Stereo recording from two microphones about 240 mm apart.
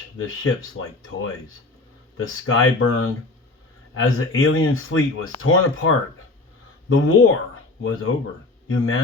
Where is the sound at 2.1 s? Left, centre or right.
Left.